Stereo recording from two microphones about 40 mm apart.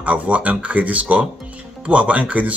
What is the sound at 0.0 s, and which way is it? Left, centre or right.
Speech, right.